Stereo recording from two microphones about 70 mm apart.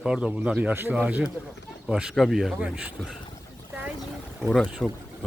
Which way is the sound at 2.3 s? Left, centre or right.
Centre.